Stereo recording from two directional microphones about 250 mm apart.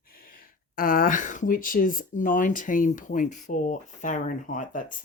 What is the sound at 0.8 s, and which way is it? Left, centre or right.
Speech, left.